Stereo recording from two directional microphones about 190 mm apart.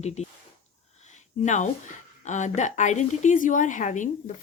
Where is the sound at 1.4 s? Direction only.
40° left (ahead or behind).